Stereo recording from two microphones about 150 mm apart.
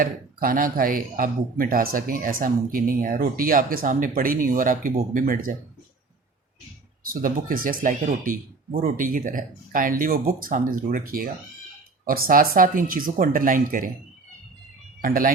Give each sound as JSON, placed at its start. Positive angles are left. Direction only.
{"t": 0.0, "sound": "speech", "side_deg": -75}
{"t": 7.0, "sound": "speech", "side_deg": -70}
{"t": 15.0, "sound": "speech", "side_deg": -70}